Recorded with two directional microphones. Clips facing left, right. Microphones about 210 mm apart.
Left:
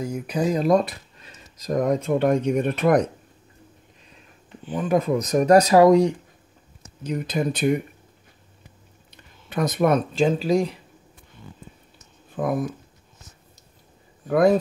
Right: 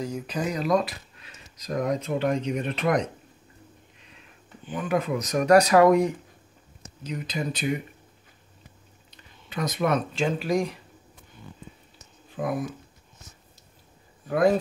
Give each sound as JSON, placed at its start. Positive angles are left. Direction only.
{"t": 0.0, "sound": "speech", "side_deg": 10}
{"t": 0.4, "sound": "speech", "side_deg": 30}
{"t": 1.7, "sound": "speech", "side_deg": 45}
{"t": 4.6, "sound": "speech", "side_deg": 35}
{"t": 7.0, "sound": "speech", "side_deg": 50}
{"t": 9.5, "sound": "speech", "side_deg": 55}
{"t": 10.2, "sound": "speech", "side_deg": 30}
{"t": 12.4, "sound": "speech", "side_deg": 50}